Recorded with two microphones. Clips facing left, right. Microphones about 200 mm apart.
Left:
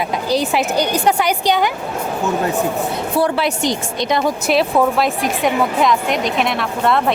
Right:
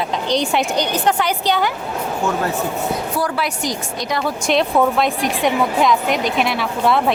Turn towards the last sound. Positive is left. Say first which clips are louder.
# even
turn(degrees=0)  # may be behind; listen again after turning